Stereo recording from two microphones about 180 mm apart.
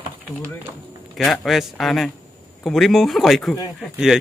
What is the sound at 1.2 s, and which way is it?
Speech, centre (ahead or behind).